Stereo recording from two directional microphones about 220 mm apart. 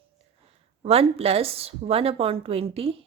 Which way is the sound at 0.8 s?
25° right (ahead or behind).